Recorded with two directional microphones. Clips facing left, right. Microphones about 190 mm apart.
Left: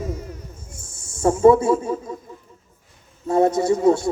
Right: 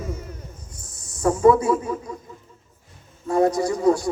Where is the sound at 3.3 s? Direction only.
25° left (ahead or behind).